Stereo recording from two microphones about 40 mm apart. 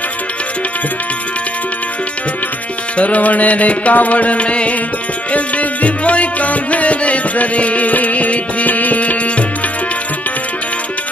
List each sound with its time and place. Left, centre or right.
3.0 s music: left